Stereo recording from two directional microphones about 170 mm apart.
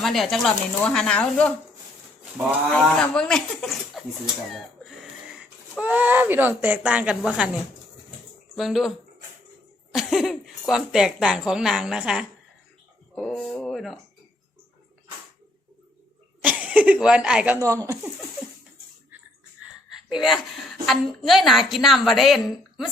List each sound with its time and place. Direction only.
0.0 s a woman's voice: centre (ahead or behind)
2.6 s a woman's voice: 5° left (ahead or behind)
4.5 s a sound: centre (ahead or behind)
5.7 s a woman's voice: 10° right (ahead or behind)
8.5 s a woman's voice: centre (ahead or behind)
9.9 s a woman's voice: centre (ahead or behind)
16.4 s speech: 10° right (ahead or behind)
17.6 s speech: 20° right (ahead or behind)
19.9 s a woman's voice: centre (ahead or behind)